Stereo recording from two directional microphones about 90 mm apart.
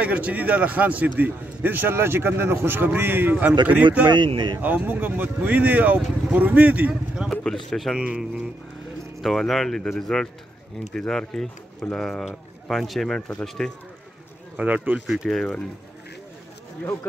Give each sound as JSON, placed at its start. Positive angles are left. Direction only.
{"t": 0.0, "sound": "a man's voice", "side_deg": -15}
{"t": 4.1, "sound": "speech", "side_deg": -60}
{"t": 4.6, "sound": "a man's voice", "side_deg": -20}
{"t": 7.7, "sound": "speech", "side_deg": 0}
{"t": 14.6, "sound": "speech", "side_deg": -15}
{"t": 15.0, "sound": "speech", "side_deg": 0}